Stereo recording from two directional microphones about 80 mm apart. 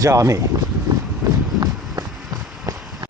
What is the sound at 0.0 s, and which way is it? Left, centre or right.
Speech, right.